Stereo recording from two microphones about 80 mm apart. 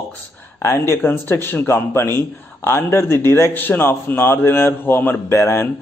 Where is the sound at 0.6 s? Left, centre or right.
Left.